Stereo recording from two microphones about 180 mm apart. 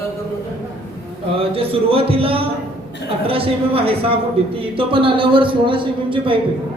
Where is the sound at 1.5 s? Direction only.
30° right (ahead or behind).